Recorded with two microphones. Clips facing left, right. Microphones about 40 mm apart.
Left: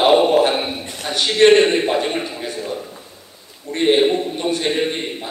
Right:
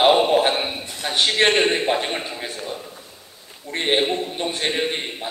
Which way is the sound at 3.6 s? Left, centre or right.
Right.